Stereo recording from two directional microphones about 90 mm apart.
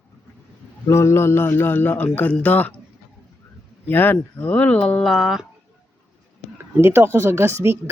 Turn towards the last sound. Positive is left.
turn(degrees=-30)  # may be behind; listen again after turning